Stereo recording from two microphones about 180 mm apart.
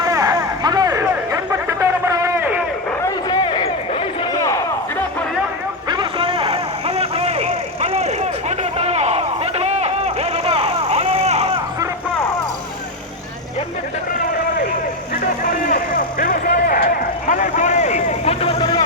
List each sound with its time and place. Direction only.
0.0 s music: 20° right (ahead or behind)
3.0 s a sound: 20° left (ahead or behind)
5.9 s vehicle: 25° right (ahead or behind)
15.7 s vehicle: 50° left (ahead or behind); by 18.7 s 35° left (ahead or behind)